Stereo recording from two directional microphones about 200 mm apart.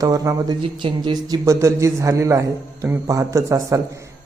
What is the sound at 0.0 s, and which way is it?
Speech, 15° right (ahead or behind).